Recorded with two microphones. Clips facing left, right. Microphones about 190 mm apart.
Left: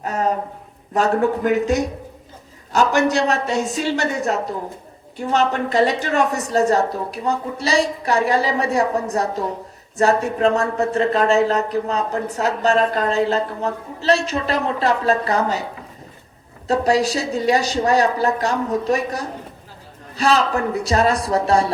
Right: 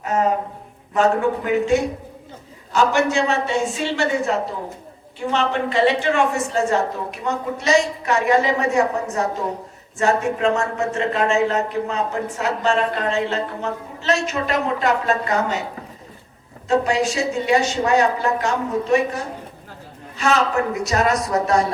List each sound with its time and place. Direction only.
0.0 s a sound: 35° left (ahead or behind)
0.9 s speech: 40° left (ahead or behind)
16.6 s speech: 35° left (ahead or behind)